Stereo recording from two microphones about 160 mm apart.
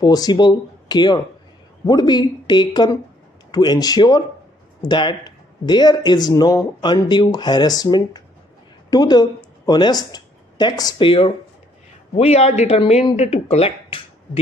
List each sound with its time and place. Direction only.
0.0 s a man's voice: 25° left (ahead or behind)